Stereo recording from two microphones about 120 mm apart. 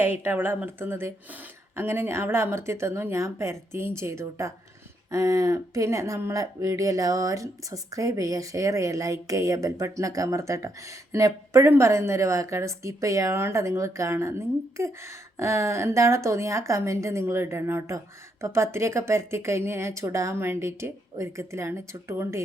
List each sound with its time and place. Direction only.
0.0 s speech: 15° right (ahead or behind)